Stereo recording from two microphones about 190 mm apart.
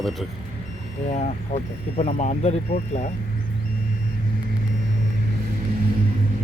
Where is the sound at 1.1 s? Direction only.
35° left (ahead or behind).